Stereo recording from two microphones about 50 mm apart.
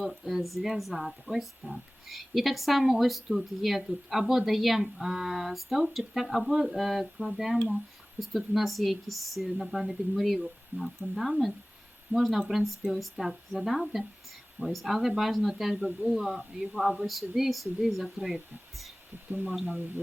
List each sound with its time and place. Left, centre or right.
0.0 s speech: centre
19.3 s speech: right